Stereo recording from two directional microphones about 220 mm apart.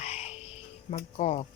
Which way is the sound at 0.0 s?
30° left (ahead or behind).